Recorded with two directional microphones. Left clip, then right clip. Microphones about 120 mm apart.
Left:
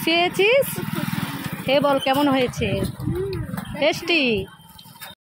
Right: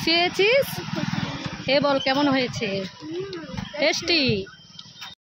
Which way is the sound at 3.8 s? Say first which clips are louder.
Left 2 dB; 15° left (ahead or behind).